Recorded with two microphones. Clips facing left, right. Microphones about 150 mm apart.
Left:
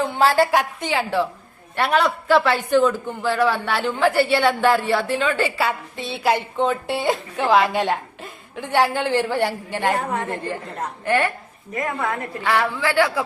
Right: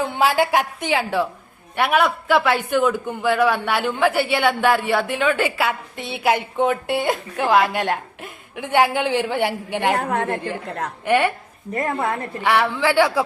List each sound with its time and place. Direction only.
0.2 s a woman's voice: 15° right (ahead or behind)
6.0 s a woman's voice: 55° right (ahead or behind)
6.2 s a woman's voice: 5° right (ahead or behind)
8.6 s speech: 15° right (ahead or behind)
10.0 s a woman's voice: 55° right (ahead or behind)
11.0 s speech: 15° right (ahead or behind)
11.7 s a woman's voice: 35° right (ahead or behind)
12.4 s speech: 15° right (ahead or behind)